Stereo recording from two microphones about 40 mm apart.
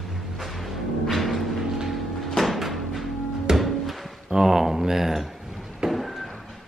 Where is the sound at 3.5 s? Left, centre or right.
Centre.